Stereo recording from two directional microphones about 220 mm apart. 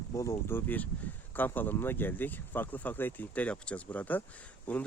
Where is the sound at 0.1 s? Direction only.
15° left (ahead or behind).